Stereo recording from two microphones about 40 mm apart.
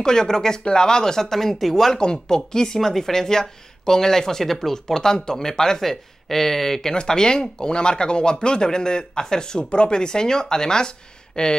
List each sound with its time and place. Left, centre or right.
0.0 s speech: centre